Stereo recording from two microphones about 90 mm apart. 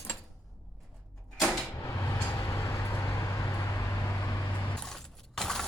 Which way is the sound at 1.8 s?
30° left (ahead or behind).